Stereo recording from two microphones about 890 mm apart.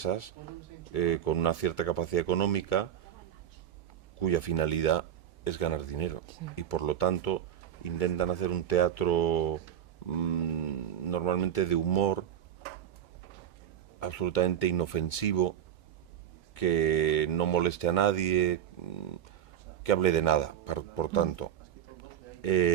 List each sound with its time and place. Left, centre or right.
0.0 s speech: left
4.2 s speech: left
14.0 s speech: left
16.6 s speech: left